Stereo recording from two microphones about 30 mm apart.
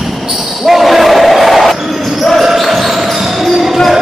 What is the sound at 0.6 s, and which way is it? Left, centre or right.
Basketball bounce, centre.